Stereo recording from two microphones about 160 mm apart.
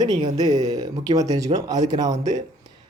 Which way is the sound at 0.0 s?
25° right (ahead or behind).